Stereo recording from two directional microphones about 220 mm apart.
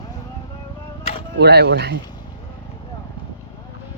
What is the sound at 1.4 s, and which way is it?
Speech, 50° right (ahead or behind).